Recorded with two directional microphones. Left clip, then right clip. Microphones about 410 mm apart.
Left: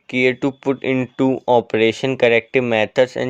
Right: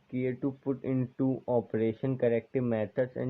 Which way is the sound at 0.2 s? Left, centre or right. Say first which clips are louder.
Left 16 dB; left.